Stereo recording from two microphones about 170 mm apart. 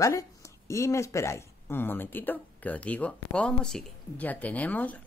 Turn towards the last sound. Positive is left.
turn(degrees=10)  # may be behind; listen again after turning